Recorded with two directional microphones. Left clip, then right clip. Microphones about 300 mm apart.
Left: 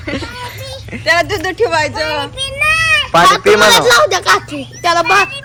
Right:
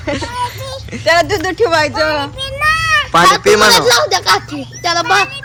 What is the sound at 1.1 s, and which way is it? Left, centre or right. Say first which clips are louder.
Speech: right 1 dB; right.